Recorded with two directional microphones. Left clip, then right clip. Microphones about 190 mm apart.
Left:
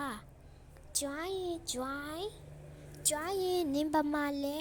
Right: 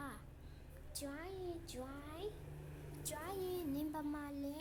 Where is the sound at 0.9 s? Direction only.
35° left (ahead or behind).